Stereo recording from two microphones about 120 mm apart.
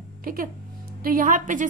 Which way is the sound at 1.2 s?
90° right.